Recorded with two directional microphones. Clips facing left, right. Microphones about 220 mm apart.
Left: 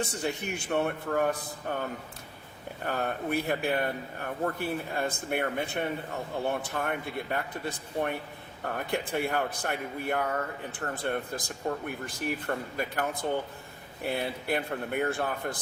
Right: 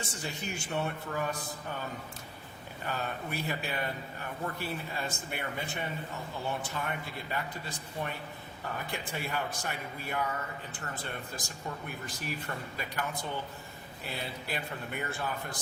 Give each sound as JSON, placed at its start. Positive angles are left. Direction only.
{"t": 0.0, "sound": "a man's voice", "side_deg": 60}
{"t": 2.8, "sound": "a man's voice", "side_deg": 55}